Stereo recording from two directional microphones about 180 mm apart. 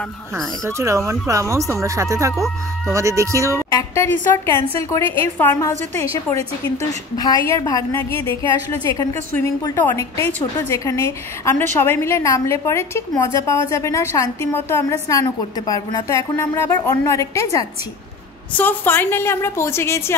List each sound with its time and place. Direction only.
0.7 s speech: 15° right (ahead or behind)
3.5 s a woman's voice: 15° left (ahead or behind)